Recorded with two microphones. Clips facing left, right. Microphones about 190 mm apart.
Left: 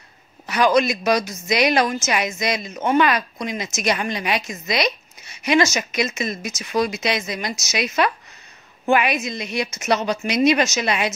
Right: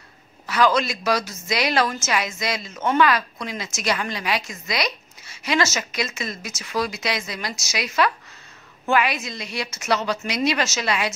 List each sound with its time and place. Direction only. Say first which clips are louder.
0.5 s a woman's voice: left 3 dB; 15° left (ahead or behind)